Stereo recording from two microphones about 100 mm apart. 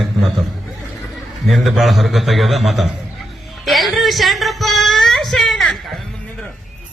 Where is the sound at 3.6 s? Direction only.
Centre (ahead or behind).